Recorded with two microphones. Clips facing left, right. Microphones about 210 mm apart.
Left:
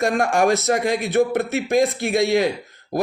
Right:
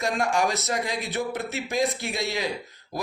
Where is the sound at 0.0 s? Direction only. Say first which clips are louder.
Left 6 dB; 55° left (ahead or behind).